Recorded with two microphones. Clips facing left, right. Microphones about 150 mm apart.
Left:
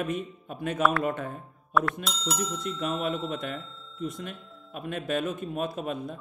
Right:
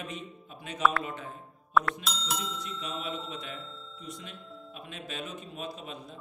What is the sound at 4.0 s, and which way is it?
A man's voice, 55° left (ahead or behind).